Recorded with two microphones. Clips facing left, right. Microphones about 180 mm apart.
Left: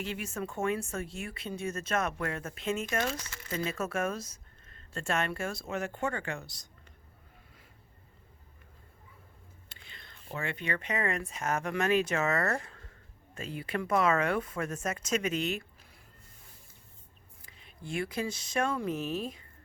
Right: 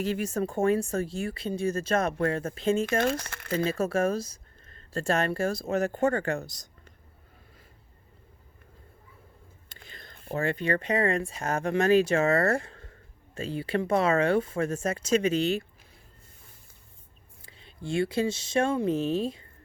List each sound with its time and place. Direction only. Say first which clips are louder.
0.0 s speech: right 8 dB; 40° right (ahead or behind)
3.0 s speech: right 7 dB; 60° right (ahead or behind)
3.5 s speech: right 7 dB; 30° right (ahead or behind)
9.6 s speech: right 6 dB; 40° right (ahead or behind)
17.4 s speech: right 7 dB; 30° right (ahead or behind)